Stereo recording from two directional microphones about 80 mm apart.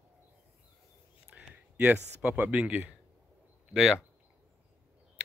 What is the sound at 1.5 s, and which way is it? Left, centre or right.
Speech, centre.